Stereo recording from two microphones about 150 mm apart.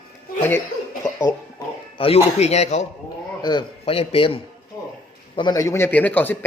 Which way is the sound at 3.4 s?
30° left (ahead or behind).